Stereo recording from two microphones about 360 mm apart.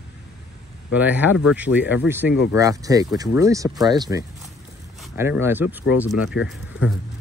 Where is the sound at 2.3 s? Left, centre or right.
Left.